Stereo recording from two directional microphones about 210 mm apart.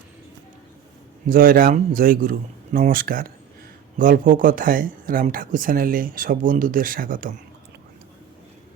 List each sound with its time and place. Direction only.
1.3 s speech: 40° right (ahead or behind)